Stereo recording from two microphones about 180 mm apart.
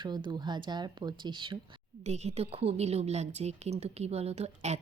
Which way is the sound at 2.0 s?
35° right (ahead or behind).